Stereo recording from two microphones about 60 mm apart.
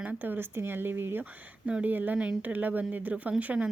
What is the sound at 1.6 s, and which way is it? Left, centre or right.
Speech, right.